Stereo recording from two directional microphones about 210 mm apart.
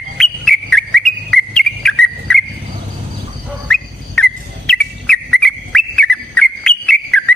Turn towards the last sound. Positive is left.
turn(degrees=5)  # may be behind; listen again after turning